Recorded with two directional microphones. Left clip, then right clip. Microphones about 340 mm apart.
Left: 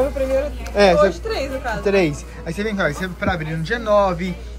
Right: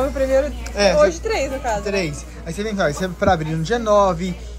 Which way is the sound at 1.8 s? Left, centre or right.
Centre.